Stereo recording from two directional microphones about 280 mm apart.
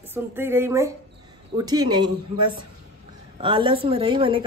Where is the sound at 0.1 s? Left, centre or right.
Centre.